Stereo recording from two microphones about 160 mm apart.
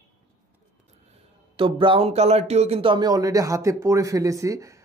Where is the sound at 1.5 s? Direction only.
30° right (ahead or behind).